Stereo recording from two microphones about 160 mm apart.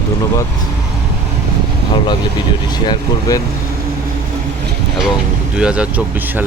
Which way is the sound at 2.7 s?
25° left (ahead or behind).